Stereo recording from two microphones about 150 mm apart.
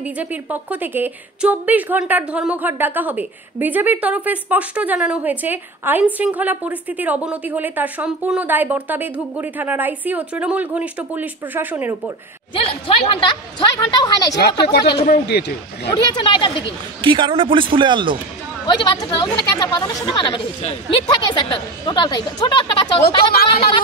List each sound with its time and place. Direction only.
0.0 s a woman's voice: 10° right (ahead or behind)
12.5 s a woman's voice: 35° left (ahead or behind)
15.0 s speech: 90° left
15.9 s a woman's voice: 30° left (ahead or behind)
17.0 s speech: 35° right (ahead or behind)
18.7 s a woman's voice: 30° left (ahead or behind)